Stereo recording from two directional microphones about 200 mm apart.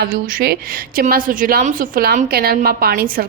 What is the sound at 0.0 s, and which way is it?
A woman's voice, 45° right (ahead or behind).